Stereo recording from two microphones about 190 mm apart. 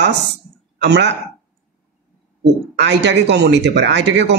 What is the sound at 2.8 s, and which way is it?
Speech, 65° right (ahead or behind).